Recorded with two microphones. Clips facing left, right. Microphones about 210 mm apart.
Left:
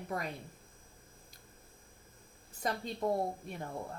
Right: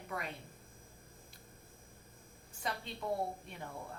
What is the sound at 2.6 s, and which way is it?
Speech, 45° left (ahead or behind).